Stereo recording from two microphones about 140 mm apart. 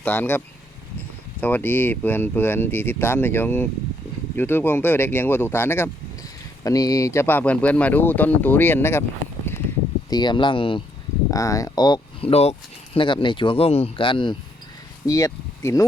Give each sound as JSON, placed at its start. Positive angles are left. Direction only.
{"t": 0.0, "sound": "speech", "side_deg": 15}
{"t": 10.1, "sound": "speech", "side_deg": 30}
{"t": 11.3, "sound": "speech", "side_deg": 25}
{"t": 12.3, "sound": "speech", "side_deg": 45}
{"t": 15.0, "sound": "speech", "side_deg": 25}